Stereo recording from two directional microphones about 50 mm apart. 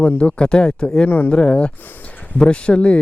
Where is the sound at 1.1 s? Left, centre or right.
Left.